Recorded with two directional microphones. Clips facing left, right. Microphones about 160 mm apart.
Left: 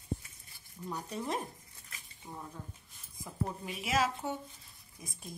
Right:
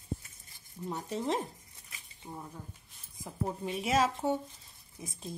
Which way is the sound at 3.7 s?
35° right (ahead or behind).